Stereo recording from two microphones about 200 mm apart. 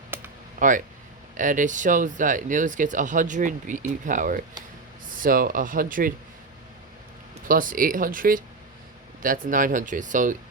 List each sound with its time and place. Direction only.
0.1 s computer keyboard: 10° right (ahead or behind)
1.4 s speech: 40° right (ahead or behind)
7.4 s speech: 45° right (ahead or behind)